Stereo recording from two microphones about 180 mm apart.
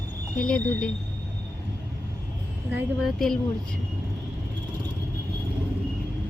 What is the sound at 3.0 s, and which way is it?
Speech, centre (ahead or behind).